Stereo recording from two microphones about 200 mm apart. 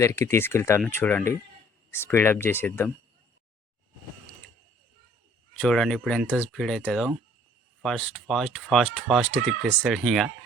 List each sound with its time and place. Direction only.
0.0 s speech: 15° left (ahead or behind)
5.5 s speech: centre (ahead or behind)